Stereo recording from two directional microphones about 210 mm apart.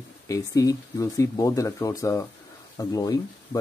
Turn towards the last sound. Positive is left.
turn(degrees=15)  # may be behind; listen again after turning